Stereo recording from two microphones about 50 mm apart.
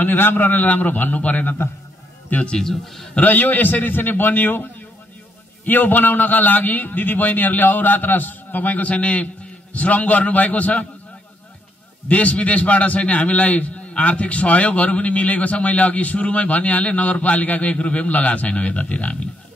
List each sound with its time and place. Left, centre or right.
0.0 s a man's voice: left
2.6 s a man's voice: centre
3.2 s a man's voice: left
5.7 s a man's voice: left
8.8 s a man's voice: left
12.1 s a man's voice: left